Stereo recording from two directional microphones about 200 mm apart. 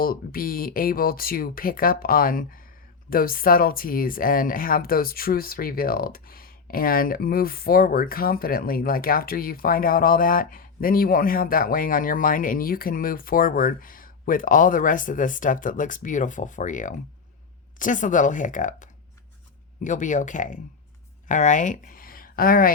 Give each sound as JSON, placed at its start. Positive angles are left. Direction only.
{"t": 0.0, "sound": "speech", "side_deg": 45}